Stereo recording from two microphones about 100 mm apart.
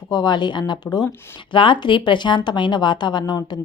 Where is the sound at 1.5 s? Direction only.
55° left (ahead or behind).